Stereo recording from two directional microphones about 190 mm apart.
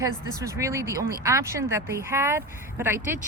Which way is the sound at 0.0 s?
15° right (ahead or behind).